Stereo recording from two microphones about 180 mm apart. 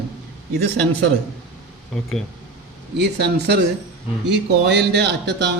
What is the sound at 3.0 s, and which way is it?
A man's voice, 70° right (ahead or behind).